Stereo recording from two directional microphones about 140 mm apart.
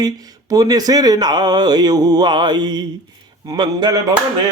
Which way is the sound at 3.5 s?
30° right (ahead or behind).